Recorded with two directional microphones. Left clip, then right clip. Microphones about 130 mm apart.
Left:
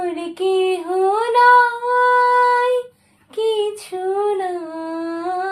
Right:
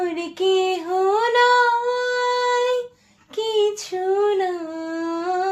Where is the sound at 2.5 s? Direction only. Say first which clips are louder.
Left 4 dB; 35° left (ahead or behind).